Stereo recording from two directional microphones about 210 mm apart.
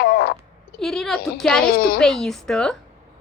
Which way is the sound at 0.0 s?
45° left (ahead or behind).